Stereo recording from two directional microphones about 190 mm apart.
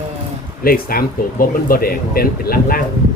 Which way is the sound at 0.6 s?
50° left (ahead or behind).